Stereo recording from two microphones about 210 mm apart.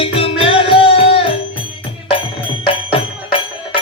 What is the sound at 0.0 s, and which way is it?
Music, 25° left (ahead or behind).